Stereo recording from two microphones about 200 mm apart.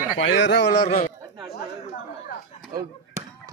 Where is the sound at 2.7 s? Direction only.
15° right (ahead or behind).